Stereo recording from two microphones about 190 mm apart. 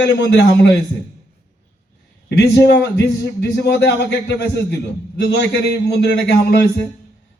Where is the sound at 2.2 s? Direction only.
60° left (ahead or behind).